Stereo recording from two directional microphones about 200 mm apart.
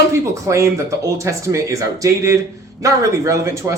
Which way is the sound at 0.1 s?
15° right (ahead or behind).